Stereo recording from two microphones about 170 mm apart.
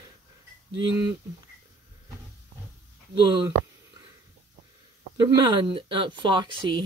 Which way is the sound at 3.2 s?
25° right (ahead or behind).